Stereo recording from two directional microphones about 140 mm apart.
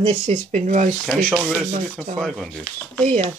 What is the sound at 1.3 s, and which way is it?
Speech, 10° right (ahead or behind).